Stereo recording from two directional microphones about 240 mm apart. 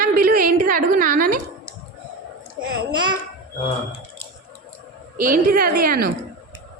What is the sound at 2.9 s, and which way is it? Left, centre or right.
Speech, centre.